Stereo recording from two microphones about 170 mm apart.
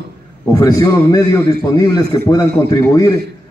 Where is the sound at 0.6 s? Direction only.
20° left (ahead or behind).